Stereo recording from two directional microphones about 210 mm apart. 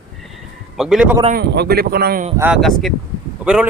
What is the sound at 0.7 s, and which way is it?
Speech, centre (ahead or behind).